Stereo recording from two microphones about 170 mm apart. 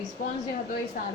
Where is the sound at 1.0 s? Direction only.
55° left (ahead or behind).